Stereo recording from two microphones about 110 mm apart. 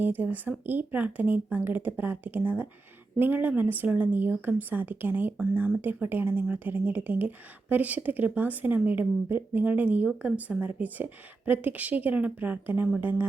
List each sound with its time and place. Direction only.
0.0 s speech: 15° right (ahead or behind)